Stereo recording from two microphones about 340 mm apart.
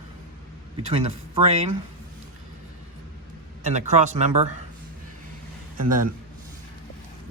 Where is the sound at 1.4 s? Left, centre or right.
Centre.